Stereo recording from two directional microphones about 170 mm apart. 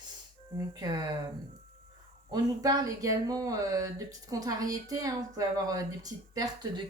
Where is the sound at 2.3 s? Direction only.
20° right (ahead or behind).